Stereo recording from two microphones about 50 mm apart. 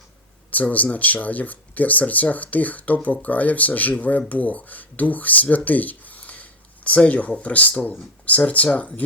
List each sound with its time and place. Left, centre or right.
0.5 s speech: left